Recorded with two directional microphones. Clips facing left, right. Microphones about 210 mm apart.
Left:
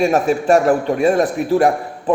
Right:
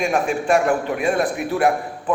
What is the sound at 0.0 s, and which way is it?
Speech, 40° left (ahead or behind).